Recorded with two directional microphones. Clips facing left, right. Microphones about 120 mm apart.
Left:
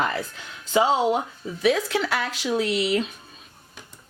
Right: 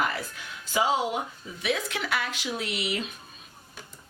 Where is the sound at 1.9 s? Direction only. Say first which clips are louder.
Left 6 dB; 35° left (ahead or behind).